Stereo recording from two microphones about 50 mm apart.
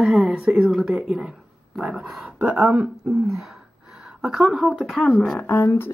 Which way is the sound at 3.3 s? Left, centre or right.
Centre.